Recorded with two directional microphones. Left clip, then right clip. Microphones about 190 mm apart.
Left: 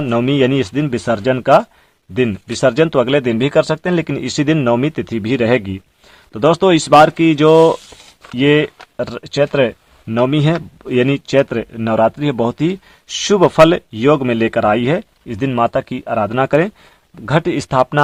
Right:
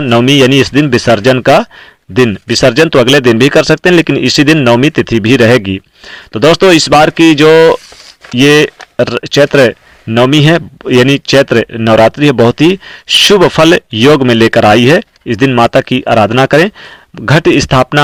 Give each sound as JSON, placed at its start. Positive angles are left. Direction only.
{"t": 0.0, "sound": "speech", "side_deg": -20}
{"t": 2.1, "sound": "speech", "side_deg": -20}